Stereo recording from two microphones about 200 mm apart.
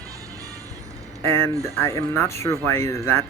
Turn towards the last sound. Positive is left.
turn(degrees=15)  # may be behind; listen again after turning